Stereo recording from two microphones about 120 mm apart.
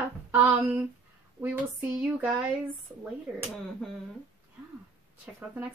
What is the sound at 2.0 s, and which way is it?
Speech, 10° right (ahead or behind).